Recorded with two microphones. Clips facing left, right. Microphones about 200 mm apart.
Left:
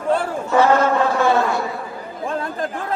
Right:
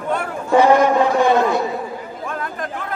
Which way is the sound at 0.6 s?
15° right (ahead or behind).